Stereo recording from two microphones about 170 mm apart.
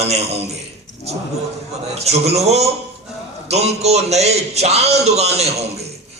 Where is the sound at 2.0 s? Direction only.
40° right (ahead or behind).